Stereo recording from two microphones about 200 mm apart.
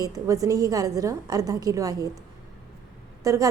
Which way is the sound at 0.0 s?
15° right (ahead or behind).